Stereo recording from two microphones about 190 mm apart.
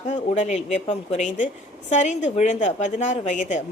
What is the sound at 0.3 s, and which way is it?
A woman's voice, 35° left (ahead or behind).